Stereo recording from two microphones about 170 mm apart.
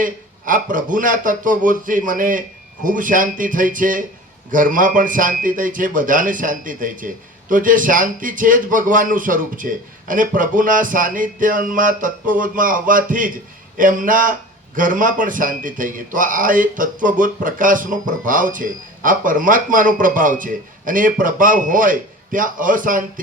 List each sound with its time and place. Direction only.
0.0 s a man's voice: 50° right (ahead or behind)